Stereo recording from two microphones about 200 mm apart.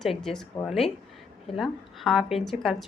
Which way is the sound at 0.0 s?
Centre (ahead or behind).